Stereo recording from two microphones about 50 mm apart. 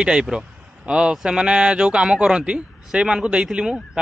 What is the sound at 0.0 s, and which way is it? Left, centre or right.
Speech, centre.